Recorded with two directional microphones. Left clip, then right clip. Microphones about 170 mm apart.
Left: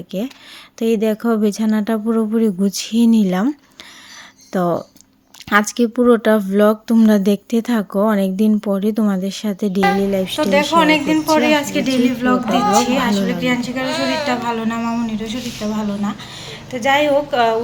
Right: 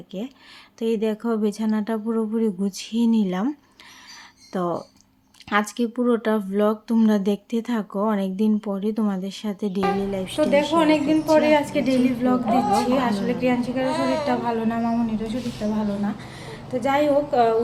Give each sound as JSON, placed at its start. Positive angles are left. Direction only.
{"t": 0.1, "sound": "speech", "side_deg": 35}
{"t": 4.5, "sound": "speech", "side_deg": 30}
{"t": 10.8, "sound": "a woman's voice", "side_deg": 5}
{"t": 13.8, "sound": "a woman's voice", "side_deg": -30}
{"t": 14.3, "sound": "a woman's voice", "side_deg": 0}
{"t": 15.6, "sound": "a woman's voice", "side_deg": 10}
{"t": 16.8, "sound": "a woman's voice", "side_deg": -5}